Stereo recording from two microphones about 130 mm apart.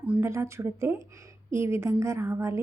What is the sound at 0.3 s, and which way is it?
Speech, 20° right (ahead or behind).